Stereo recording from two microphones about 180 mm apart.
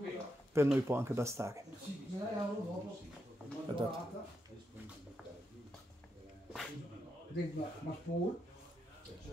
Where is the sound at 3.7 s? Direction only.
30° right (ahead or behind).